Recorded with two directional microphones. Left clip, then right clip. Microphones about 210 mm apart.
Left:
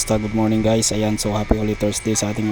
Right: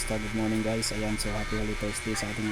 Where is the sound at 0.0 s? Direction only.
45° left (ahead or behind).